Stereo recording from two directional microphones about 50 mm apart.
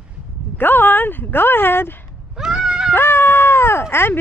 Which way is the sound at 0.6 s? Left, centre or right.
Left.